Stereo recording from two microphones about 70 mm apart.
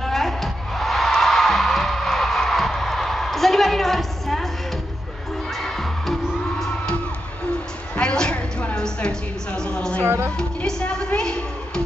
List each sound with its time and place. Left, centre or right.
0.0 s music: centre
5.6 s music: centre
7.9 s a sound: centre
10.0 s speech: right
10.3 s music: centre